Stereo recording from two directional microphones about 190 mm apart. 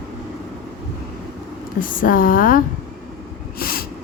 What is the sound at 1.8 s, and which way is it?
Speech, 45° left (ahead or behind).